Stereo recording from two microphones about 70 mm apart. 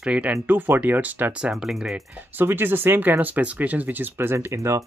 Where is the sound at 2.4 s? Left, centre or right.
Right.